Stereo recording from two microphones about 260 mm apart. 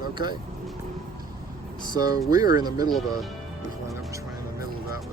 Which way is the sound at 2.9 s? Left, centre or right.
Centre.